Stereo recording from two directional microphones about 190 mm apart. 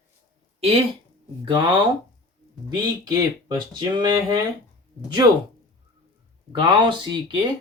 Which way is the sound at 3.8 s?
20° right (ahead or behind).